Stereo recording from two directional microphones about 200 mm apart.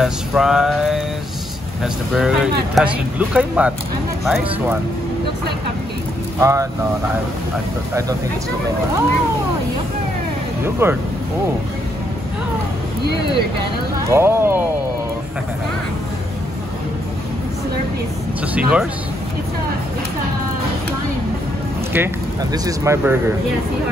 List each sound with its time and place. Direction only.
0.0 s speech: centre (ahead or behind)
6.4 s speech: 15° right (ahead or behind)
10.6 s speech: 10° right (ahead or behind)
14.1 s speech: 10° right (ahead or behind)
18.5 s speech: 5° right (ahead or behind)
21.9 s speech: 15° right (ahead or behind)